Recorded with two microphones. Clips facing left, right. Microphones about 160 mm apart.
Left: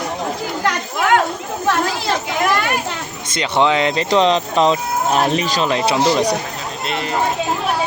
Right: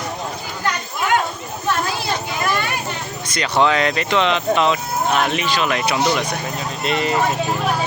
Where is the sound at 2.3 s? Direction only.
80° left.